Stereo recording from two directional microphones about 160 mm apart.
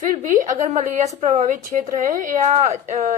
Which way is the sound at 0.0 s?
55° right (ahead or behind).